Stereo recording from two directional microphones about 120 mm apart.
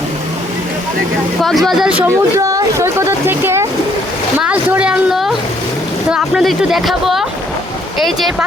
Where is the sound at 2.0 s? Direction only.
30° right (ahead or behind).